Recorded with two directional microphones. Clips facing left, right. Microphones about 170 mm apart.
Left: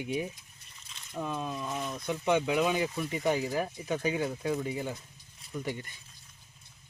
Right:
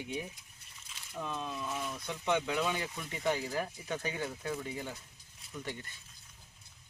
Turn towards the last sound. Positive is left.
turn(degrees=15)  # may be behind; listen again after turning